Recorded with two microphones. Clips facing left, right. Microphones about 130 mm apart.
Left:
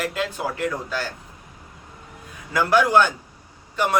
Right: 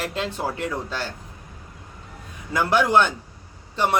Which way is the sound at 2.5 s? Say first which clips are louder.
Left 1 dB; 25° right (ahead or behind).